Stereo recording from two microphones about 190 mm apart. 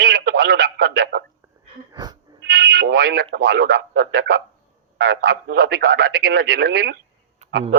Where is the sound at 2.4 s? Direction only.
60° right (ahead or behind).